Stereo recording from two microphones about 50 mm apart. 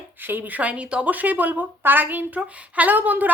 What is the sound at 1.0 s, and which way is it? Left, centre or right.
Speech, right.